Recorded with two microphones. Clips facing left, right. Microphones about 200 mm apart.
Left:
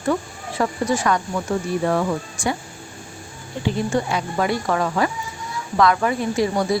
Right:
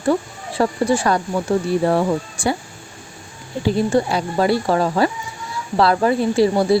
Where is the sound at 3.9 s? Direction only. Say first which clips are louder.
Right 4 dB; 35° right (ahead or behind).